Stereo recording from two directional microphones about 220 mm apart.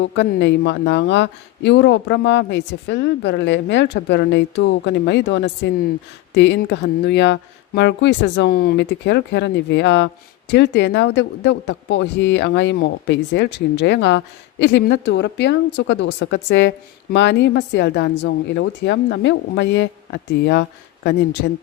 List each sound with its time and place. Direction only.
0.0 s speech: 50° left (ahead or behind)